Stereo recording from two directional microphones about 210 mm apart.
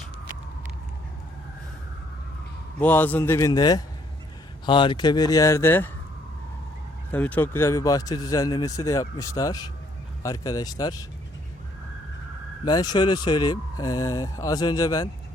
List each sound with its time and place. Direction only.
2.7 s speech: 10° left (ahead or behind)
7.1 s speech: 10° left (ahead or behind)
12.6 s speech: 20° left (ahead or behind)